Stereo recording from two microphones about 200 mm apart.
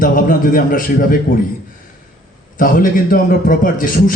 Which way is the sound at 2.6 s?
45° left (ahead or behind).